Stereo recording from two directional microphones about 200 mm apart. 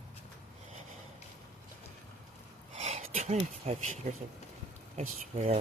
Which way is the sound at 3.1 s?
35° right (ahead or behind).